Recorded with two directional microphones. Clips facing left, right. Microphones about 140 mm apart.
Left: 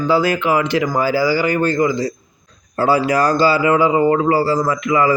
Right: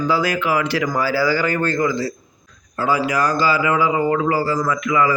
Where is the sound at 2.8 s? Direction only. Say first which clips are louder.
Left 4 dB; 30° left (ahead or behind).